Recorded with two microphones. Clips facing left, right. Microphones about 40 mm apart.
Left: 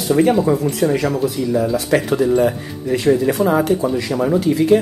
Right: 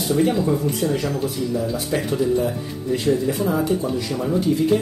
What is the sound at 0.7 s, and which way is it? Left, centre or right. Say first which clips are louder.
Speech: left 5 dB; left.